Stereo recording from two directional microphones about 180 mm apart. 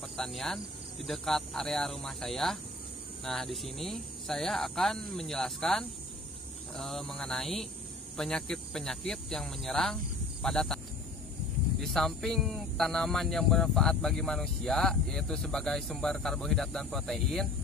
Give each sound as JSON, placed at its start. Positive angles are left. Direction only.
{"t": 0.2, "sound": "a man's voice", "side_deg": 0}
{"t": 11.8, "sound": "a man's voice", "side_deg": 0}